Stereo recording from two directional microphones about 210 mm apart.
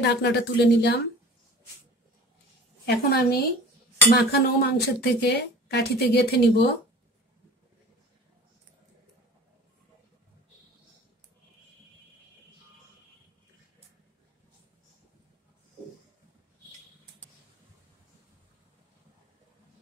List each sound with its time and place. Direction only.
0.0 s speech: 55° left (ahead or behind)
2.8 s speech: 50° left (ahead or behind)